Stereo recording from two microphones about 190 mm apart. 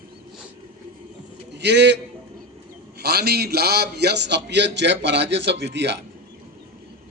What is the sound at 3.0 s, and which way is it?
A man's voice, 55° right (ahead or behind).